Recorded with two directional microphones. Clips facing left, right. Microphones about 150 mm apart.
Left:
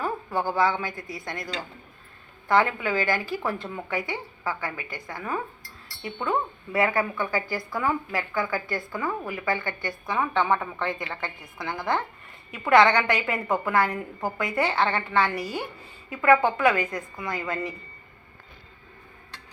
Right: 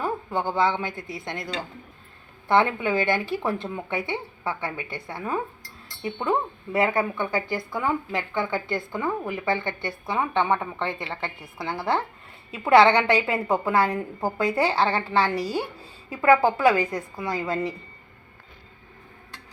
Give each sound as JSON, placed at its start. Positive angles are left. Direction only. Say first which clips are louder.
{"t": 0.0, "sound": "a woman's voice", "louder": "right 1 dB", "side_deg": -20}
{"t": 16.8, "sound": "a woman's voice", "louder": "right 3 dB", "side_deg": -10}
{"t": 17.2, "sound": "a woman's voice", "louder": "right 4 dB", "side_deg": -35}